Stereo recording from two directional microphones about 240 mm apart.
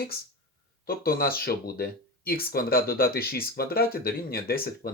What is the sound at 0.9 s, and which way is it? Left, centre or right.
Speech, left.